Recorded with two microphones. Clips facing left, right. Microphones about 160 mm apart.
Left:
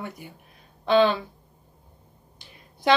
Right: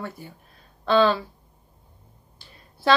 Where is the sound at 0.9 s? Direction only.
20° left (ahead or behind).